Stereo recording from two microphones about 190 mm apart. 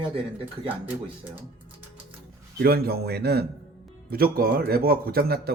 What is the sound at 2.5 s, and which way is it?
Speech, 55° right (ahead or behind).